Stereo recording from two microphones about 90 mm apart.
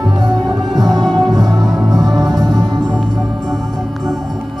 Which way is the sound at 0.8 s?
50° right (ahead or behind).